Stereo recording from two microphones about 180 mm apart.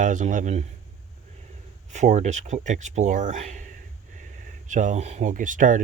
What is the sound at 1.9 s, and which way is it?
Speech, 40° right (ahead or behind).